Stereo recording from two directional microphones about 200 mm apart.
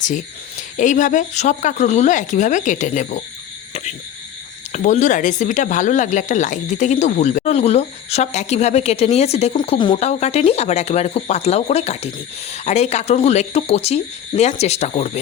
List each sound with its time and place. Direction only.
0.8 s speech: 40° left (ahead or behind)
4.7 s speech: 35° left (ahead or behind)
9.9 s speech: 35° left (ahead or behind)